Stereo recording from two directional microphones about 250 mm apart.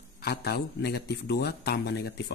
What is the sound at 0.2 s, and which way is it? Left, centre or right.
Speech, left.